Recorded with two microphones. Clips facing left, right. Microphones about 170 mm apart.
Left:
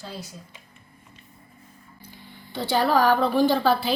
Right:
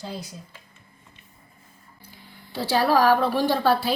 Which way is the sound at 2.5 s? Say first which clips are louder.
Right 1 dB; 5° right (ahead or behind).